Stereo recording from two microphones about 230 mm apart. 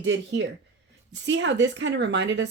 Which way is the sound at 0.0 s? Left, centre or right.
Right.